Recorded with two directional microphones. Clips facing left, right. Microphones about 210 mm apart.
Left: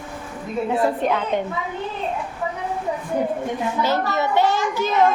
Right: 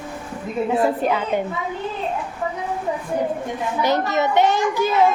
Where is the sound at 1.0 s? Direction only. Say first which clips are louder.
Even; 5° right (ahead or behind).